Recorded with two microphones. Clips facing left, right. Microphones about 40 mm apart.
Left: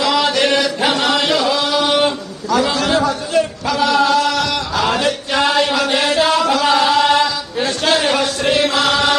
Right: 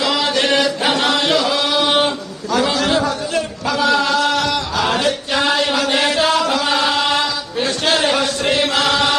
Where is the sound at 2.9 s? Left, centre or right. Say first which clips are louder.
Left 3 dB; left.